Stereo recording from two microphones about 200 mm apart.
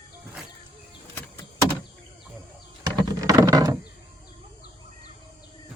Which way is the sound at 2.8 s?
20° right (ahead or behind).